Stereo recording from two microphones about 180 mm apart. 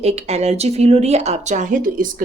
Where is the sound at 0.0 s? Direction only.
35° right (ahead or behind).